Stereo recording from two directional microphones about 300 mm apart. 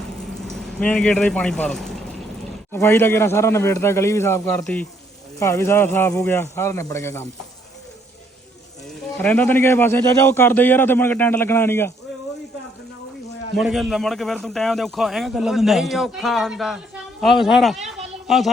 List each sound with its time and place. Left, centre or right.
0.4 s a man's voice: centre
9.1 s a man's voice: centre
13.6 s a man's voice: centre